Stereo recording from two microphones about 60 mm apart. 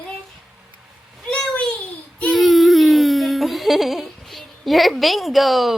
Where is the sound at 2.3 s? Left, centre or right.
Centre.